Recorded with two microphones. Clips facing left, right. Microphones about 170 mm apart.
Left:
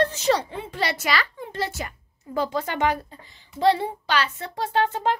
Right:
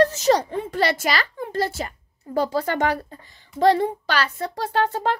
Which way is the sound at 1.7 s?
30° right (ahead or behind).